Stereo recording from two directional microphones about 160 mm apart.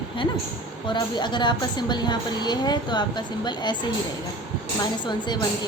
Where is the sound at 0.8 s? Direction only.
30° left (ahead or behind).